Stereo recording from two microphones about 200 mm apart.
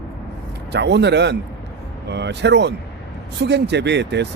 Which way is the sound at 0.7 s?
60° right (ahead or behind).